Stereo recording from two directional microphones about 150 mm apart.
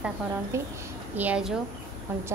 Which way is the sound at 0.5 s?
20° right (ahead or behind).